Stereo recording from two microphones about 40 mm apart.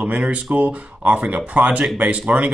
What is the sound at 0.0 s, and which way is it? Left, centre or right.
Speech, right.